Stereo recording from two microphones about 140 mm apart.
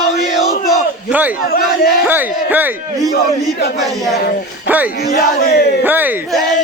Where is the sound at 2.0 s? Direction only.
15° right (ahead or behind).